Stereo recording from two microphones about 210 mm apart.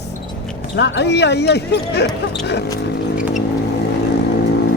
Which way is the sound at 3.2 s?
5° right (ahead or behind).